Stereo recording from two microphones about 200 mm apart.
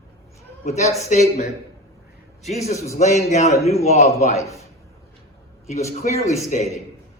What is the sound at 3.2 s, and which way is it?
A man's voice, 35° left (ahead or behind).